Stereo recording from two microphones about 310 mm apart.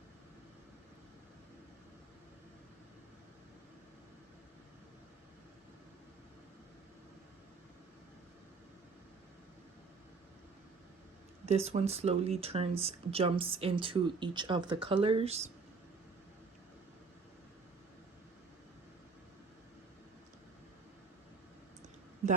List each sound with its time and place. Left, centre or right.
11.4 s speech: centre